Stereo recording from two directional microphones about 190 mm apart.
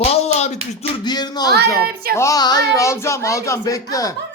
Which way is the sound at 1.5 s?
55° right (ahead or behind).